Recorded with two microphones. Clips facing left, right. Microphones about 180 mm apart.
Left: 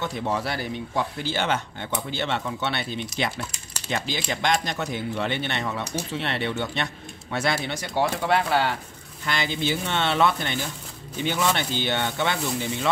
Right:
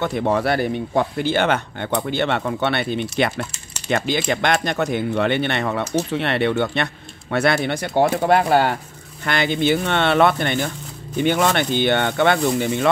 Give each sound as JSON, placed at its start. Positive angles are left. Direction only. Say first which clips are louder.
{"t": 0.0, "sound": "speech", "louder": "right 7 dB", "side_deg": -60}
{"t": 9.2, "sound": "speech", "louder": "right 7 dB", "side_deg": -60}